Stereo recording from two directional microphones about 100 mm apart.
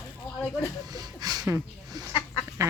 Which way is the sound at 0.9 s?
40° right (ahead or behind).